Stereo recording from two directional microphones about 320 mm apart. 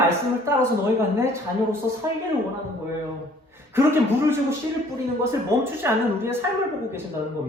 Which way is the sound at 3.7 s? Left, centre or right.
Centre.